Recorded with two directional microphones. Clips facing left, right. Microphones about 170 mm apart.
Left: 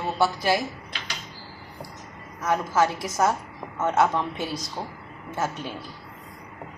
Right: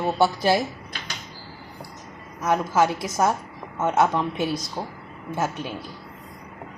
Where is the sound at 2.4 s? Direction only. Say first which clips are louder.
Right 2 dB; 20° right (ahead or behind).